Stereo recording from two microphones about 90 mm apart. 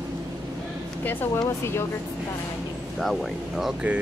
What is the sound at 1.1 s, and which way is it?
Speech, 25° left (ahead or behind).